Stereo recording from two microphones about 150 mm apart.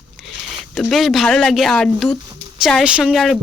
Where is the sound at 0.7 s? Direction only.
Centre (ahead or behind).